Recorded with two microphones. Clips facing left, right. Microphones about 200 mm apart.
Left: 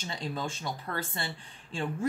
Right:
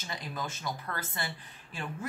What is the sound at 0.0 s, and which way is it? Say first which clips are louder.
Speech: left 3 dB; 25° left (ahead or behind).